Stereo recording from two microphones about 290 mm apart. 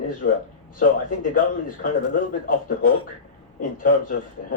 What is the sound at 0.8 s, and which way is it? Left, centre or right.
A man's voice, left.